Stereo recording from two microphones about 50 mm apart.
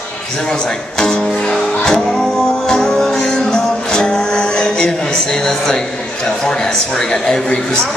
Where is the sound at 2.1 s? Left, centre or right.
Centre.